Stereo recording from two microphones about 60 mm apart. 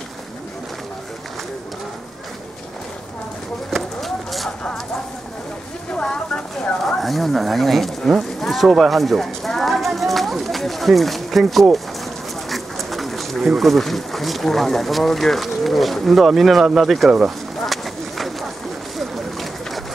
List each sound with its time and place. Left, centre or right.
3.7 s a sound: centre
5.9 s speech: centre
7.0 s speech: centre
8.4 s clip-clop: centre
12.4 s bird: centre
13.6 s speech: centre
17.6 s a sound: centre
18.9 s bird: centre